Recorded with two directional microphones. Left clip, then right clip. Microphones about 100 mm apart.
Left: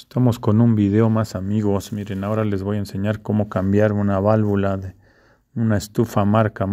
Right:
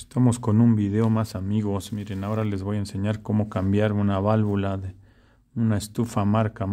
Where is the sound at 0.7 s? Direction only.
55° left (ahead or behind).